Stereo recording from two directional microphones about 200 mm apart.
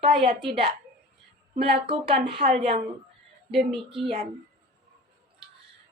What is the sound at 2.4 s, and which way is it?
Speech, 35° right (ahead or behind).